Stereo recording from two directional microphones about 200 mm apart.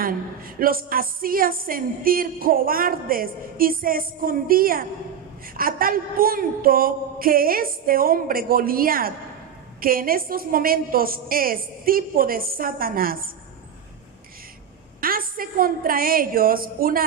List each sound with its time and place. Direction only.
0.6 s a woman's voice: 45° right (ahead or behind)
15.0 s a woman's voice: 45° right (ahead or behind)